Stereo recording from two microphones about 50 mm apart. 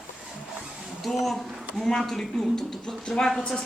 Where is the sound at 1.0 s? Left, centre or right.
Centre.